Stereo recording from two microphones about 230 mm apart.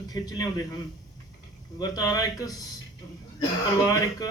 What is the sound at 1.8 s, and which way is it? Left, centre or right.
Speech, centre.